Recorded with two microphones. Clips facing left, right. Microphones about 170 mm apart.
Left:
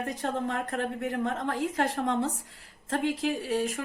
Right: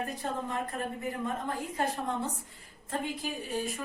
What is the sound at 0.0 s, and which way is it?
A woman's voice, 80° left.